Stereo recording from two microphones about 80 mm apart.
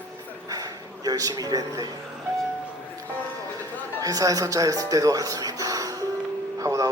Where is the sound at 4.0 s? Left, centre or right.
Right.